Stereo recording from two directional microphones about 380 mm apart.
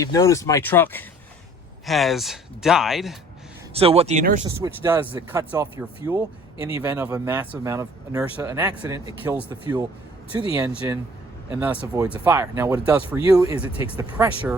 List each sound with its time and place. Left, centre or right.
0.0 s speech: centre
3.8 s speech: centre
4.6 s speech: centre
6.6 s speech: centre
6.8 s speech: centre